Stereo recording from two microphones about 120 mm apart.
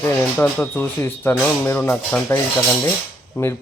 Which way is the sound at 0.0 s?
15° left (ahead or behind).